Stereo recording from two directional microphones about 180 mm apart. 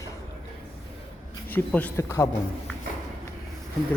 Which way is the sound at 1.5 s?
10° left (ahead or behind).